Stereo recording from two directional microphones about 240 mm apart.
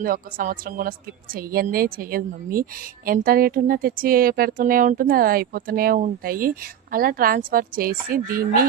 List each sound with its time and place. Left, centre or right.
0.0 s speech: right